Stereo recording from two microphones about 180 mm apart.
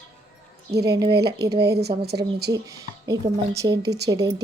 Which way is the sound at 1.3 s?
65° right (ahead or behind).